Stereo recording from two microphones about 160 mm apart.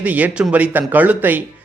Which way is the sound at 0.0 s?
10° right (ahead or behind).